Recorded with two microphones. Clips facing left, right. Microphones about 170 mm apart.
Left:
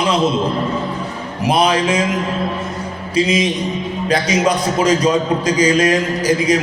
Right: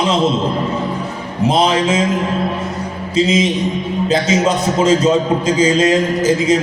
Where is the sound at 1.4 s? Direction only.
25° right (ahead or behind).